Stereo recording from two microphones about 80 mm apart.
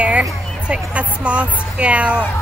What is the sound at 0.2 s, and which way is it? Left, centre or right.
Speech, centre.